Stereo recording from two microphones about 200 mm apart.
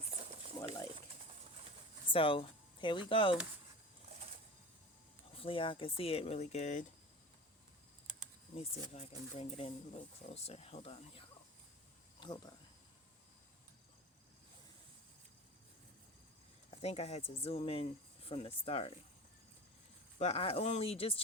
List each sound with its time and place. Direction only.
0.1 s boiling: 30° right (ahead or behind)
2.1 s speech: 25° left (ahead or behind)
5.3 s speech: 25° left (ahead or behind)
8.5 s speech: 30° left (ahead or behind)
16.7 s speech: 30° left (ahead or behind)
20.1 s speech: 30° left (ahead or behind)